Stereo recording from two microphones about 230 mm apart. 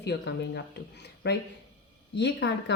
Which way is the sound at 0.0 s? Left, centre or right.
Left.